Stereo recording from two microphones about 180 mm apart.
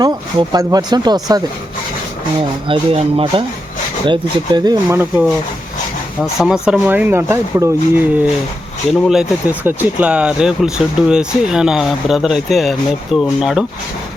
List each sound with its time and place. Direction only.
0.0 s speech: 20° right (ahead or behind)
2.6 s speech: 30° right (ahead or behind)
6.4 s speech: 5° right (ahead or behind)